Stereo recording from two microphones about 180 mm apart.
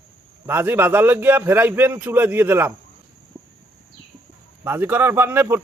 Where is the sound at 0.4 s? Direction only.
10° right (ahead or behind).